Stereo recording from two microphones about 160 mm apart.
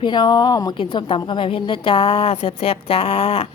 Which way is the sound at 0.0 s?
25° left (ahead or behind).